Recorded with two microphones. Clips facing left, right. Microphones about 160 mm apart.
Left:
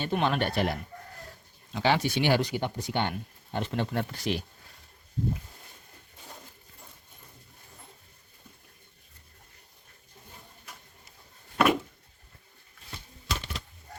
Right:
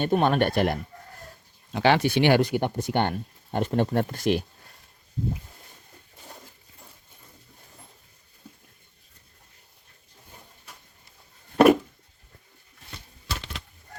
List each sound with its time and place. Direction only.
0.0 s speech: 45° right (ahead or behind)
1.7 s speech: 65° right (ahead or behind)
11.5 s a sound: 40° right (ahead or behind)